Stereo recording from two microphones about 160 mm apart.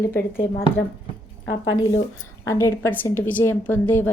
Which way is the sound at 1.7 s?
20° left (ahead or behind).